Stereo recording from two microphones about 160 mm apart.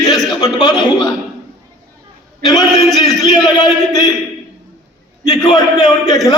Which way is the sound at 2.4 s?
25° left (ahead or behind).